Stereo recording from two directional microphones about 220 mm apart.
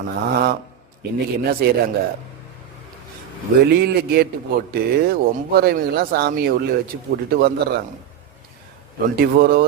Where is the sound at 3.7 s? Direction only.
45° right (ahead or behind).